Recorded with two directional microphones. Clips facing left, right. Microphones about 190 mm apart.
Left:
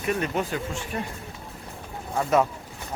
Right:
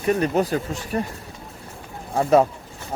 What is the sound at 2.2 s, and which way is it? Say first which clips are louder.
Speech: right 5 dB; 35° right (ahead or behind).